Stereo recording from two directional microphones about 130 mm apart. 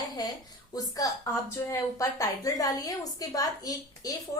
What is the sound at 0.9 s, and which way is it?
A woman's voice, 25° left (ahead or behind).